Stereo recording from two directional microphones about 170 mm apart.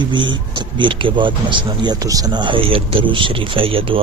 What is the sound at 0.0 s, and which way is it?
A man's voice, 30° right (ahead or behind).